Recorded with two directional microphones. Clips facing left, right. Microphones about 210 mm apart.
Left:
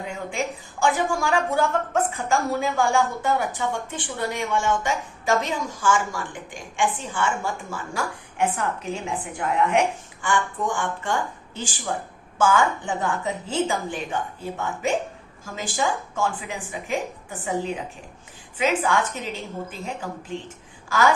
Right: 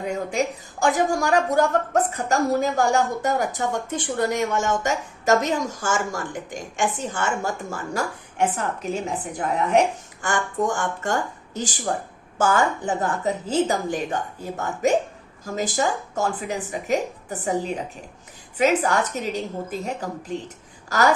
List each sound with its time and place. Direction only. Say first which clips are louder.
0.1 s a woman's voice: right 5 dB; 40° right (ahead or behind)